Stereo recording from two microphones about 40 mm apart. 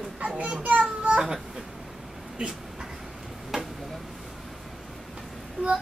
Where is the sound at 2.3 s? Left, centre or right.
Centre.